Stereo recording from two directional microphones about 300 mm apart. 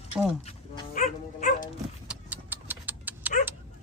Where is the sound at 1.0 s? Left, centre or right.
Left.